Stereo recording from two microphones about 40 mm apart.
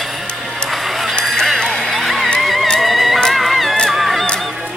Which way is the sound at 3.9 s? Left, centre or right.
Centre.